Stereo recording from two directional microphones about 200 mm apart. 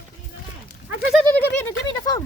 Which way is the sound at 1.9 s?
20° left (ahead or behind).